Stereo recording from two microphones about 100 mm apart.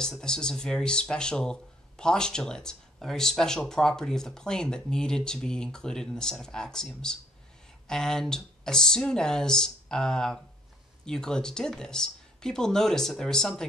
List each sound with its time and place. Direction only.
0.0 s speech: 5° left (ahead or behind)